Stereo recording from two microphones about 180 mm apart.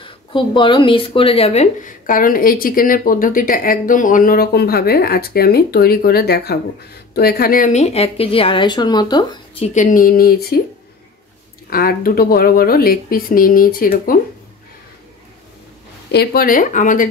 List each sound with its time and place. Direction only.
0.0 s a woman's voice: 30° left (ahead or behind)
9.8 s speech: 50° left (ahead or behind)
11.7 s speech: 55° left (ahead or behind)
16.1 s speech: 60° left (ahead or behind)